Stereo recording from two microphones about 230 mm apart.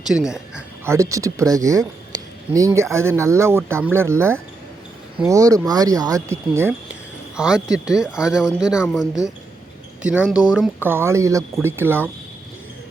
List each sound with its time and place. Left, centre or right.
0.0 s speech: centre